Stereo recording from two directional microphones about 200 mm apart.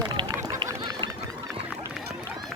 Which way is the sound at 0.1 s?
15° right (ahead or behind).